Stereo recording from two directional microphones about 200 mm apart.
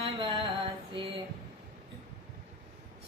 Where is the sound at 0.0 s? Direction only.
25° right (ahead or behind).